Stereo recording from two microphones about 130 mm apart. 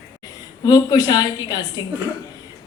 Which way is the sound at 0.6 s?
30° left (ahead or behind).